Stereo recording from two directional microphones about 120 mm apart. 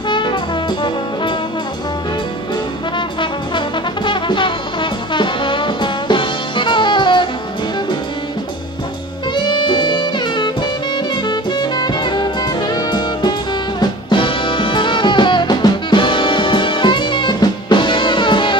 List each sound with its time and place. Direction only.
0.1 s brass instrument: 40° left (ahead or behind)
3.2 s brass instrument: 40° left (ahead or behind)
9.3 s music: 40° left (ahead or behind)
11.2 s saxophone: 40° left (ahead or behind)
13.7 s music: 45° left (ahead or behind)